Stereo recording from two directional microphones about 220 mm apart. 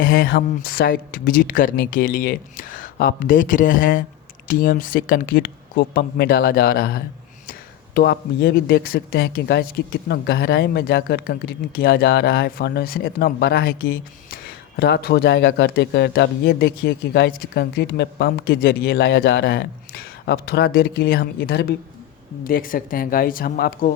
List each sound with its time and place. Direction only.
0.0 s speech: 40° left (ahead or behind)